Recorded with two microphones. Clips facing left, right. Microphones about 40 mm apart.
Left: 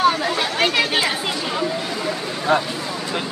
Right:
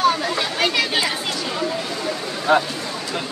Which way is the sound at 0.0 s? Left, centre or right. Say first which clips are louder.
Left 1 dB; centre.